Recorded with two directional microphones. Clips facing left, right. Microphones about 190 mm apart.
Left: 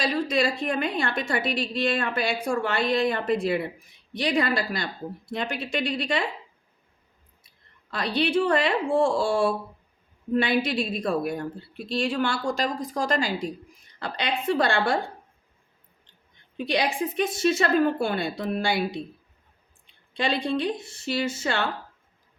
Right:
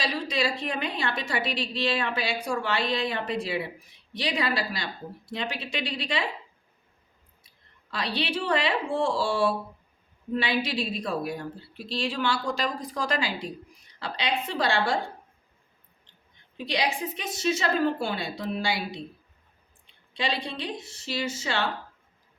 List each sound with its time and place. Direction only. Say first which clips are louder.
0.0 s a woman's voice: left 4 dB; 50° left (ahead or behind)
7.9 s a woman's voice: left 5 dB; 50° left (ahead or behind)
16.6 s a woman's voice: left 3 dB; 50° left (ahead or behind)
20.1 s a woman's voice: left 6 dB; 50° left (ahead or behind)